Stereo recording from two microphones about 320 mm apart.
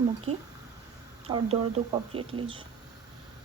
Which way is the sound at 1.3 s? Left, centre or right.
Centre.